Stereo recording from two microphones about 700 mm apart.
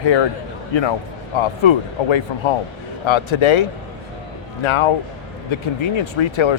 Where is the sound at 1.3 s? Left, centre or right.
Left.